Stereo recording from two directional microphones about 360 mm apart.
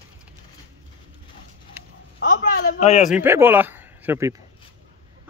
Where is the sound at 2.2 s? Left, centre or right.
Left.